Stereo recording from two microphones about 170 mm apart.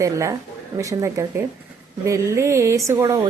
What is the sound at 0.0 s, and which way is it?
A woman's voice, 20° right (ahead or behind).